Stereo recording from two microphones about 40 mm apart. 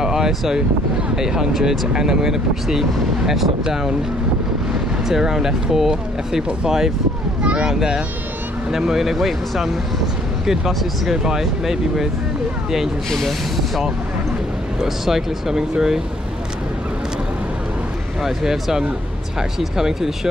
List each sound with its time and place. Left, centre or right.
0.0 s wind: centre
1.1 s speech: centre
5.0 s speech: centre
11.2 s speech: centre
14.8 s speech: centre
18.2 s speech: centre